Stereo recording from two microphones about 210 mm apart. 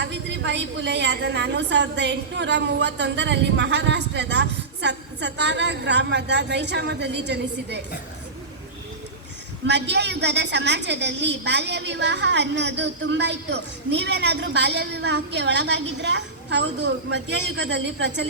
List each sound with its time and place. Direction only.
0.0 s a woman's voice: 55° right (ahead or behind)
9.6 s a woman's voice: 55° right (ahead or behind)